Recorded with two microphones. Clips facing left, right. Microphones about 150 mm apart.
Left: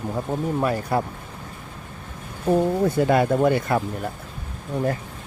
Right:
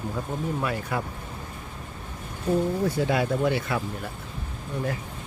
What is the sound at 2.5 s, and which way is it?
Speech, 60° left (ahead or behind).